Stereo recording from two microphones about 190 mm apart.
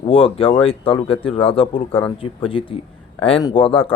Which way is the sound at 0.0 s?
30° left (ahead or behind).